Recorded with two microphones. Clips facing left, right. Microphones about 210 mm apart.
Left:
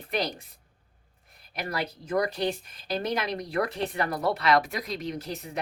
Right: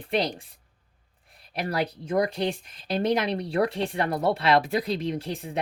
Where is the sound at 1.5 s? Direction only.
30° right (ahead or behind).